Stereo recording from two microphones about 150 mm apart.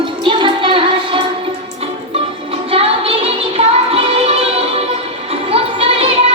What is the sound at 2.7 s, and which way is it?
Music, 40° right (ahead or behind).